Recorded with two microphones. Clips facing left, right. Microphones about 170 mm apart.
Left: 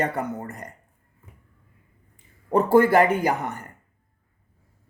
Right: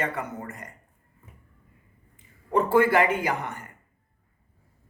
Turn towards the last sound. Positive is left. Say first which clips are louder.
# left 4 dB
turn(degrees=40)  # may be behind; listen again after turning